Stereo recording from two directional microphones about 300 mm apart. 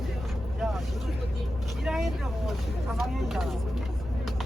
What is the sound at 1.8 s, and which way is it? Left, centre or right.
Speech, centre.